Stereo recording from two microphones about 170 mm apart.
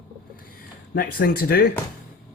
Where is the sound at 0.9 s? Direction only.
65° left (ahead or behind).